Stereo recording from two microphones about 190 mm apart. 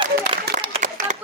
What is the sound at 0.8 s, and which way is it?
Clapping, 40° right (ahead or behind).